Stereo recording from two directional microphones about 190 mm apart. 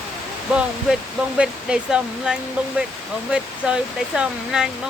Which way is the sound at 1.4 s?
5° right (ahead or behind).